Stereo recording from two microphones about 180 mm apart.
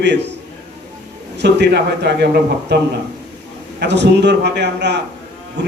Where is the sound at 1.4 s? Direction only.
70° right (ahead or behind).